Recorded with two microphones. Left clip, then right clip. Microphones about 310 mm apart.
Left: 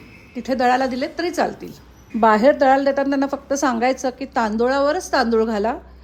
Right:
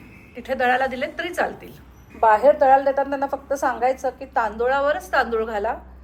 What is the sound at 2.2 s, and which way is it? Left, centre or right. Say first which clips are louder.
A woman's voice: left 1 dB; left.